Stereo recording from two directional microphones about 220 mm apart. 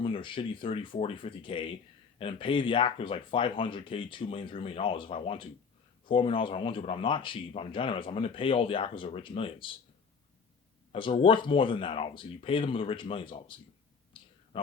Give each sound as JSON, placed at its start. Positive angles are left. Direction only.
{"t": 0.0, "sound": "speech", "side_deg": 25}
{"t": 10.9, "sound": "speech", "side_deg": 25}
{"t": 14.1, "sound": "clicking", "side_deg": 25}
{"t": 14.5, "sound": "speech", "side_deg": 25}